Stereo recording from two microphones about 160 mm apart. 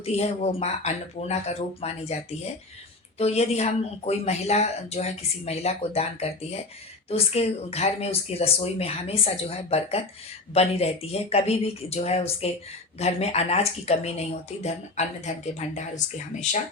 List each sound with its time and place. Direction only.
0.0 s speech: 40° left (ahead or behind)